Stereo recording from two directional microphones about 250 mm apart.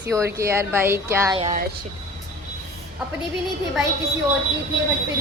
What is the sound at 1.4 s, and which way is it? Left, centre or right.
Speech, right.